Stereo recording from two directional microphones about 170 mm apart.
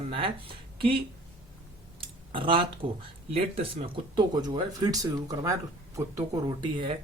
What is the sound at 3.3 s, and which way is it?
Speech, 30° right (ahead or behind).